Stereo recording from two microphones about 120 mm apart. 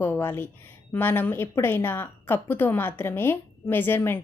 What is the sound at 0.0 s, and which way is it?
A woman's voice, 15° left (ahead or behind).